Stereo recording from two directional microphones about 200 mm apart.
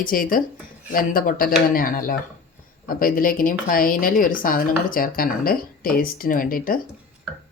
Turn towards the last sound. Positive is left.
turn(degrees=45)  # may be behind; listen again after turning